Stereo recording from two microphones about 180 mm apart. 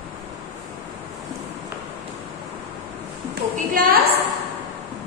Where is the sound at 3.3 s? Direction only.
55° right (ahead or behind).